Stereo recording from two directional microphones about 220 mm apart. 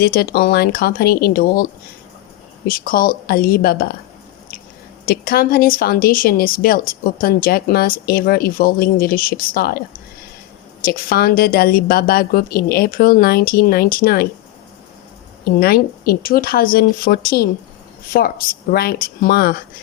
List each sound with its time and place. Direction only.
0.0 s speech: 45° left (ahead or behind)
2.6 s speech: 40° left (ahead or behind)
5.0 s speech: 45° left (ahead or behind)
15.4 s speech: 45° left (ahead or behind)